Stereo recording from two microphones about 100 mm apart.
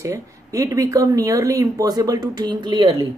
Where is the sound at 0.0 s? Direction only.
30° right (ahead or behind).